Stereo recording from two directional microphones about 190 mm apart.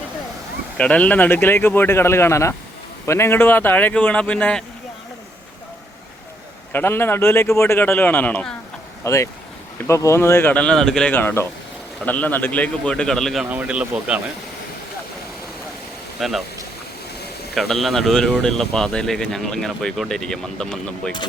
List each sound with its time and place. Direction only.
0.8 s speech: 5° left (ahead or behind)
6.7 s speech: 10° left (ahead or behind); by 14.2 s 5° right (ahead or behind)
16.2 s speech: centre (ahead or behind)
17.5 s speech: centre (ahead or behind)